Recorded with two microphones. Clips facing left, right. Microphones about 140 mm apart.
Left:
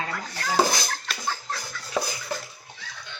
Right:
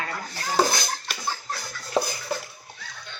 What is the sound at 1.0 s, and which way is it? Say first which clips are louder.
Chicken: even; 15° right (ahead or behind).